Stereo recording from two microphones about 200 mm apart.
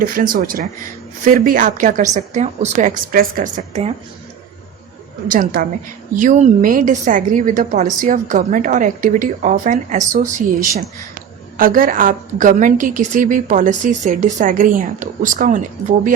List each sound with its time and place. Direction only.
0.0 s a woman's voice: 45° right (ahead or behind)
5.3 s a woman's voice: 45° right (ahead or behind)